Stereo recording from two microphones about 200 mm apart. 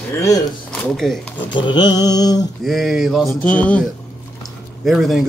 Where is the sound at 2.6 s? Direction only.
Centre (ahead or behind).